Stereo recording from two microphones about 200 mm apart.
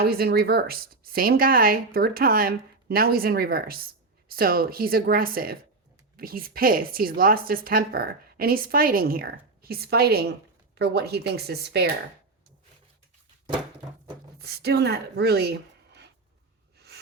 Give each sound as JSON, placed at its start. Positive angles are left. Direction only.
{"t": 0.0, "sound": "a woman's voice", "side_deg": -50}
{"t": 14.3, "sound": "a woman's voice", "side_deg": -50}
{"t": 16.7, "sound": "a sound", "side_deg": -55}